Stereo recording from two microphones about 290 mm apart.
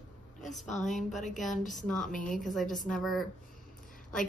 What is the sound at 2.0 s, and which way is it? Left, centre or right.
Music, left.